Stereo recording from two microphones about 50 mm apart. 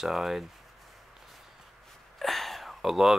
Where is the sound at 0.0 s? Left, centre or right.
Centre.